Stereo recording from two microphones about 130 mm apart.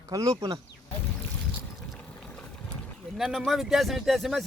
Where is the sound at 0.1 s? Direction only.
25° right (ahead or behind).